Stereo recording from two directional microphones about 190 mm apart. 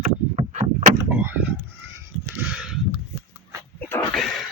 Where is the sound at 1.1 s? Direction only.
10° right (ahead or behind).